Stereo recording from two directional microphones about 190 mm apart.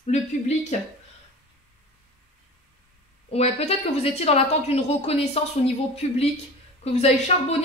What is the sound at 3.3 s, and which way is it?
Speech, 35° left (ahead or behind).